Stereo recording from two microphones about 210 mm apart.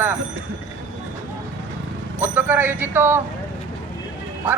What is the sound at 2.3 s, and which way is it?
Speech, 10° right (ahead or behind).